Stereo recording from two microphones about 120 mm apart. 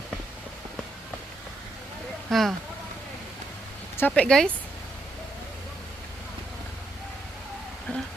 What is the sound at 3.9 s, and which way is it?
Speech, 20° left (ahead or behind).